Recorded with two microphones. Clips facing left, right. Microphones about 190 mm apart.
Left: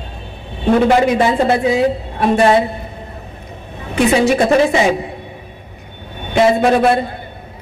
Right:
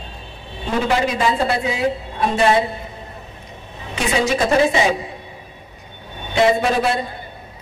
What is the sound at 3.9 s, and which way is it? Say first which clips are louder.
Speech: left 7 dB; 60° left (ahead or behind).